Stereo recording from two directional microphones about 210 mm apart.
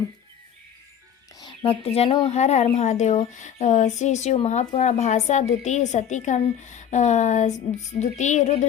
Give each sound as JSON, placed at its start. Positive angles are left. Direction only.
{"t": 1.4, "sound": "a woman's voice", "side_deg": 25}